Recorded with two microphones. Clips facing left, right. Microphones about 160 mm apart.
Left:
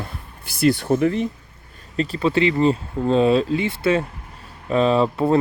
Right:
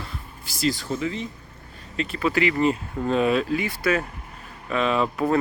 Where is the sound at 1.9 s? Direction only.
35° left (ahead or behind).